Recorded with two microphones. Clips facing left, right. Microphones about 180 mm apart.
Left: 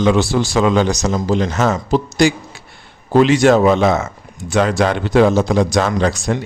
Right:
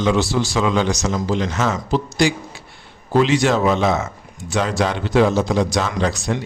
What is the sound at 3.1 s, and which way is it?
A man's voice, 50° left (ahead or behind).